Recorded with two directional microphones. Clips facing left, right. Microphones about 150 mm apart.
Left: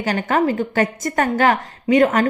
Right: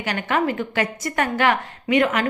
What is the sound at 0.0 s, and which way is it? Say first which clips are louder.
A woman's voice: left 4 dB; 40° left (ahead or behind).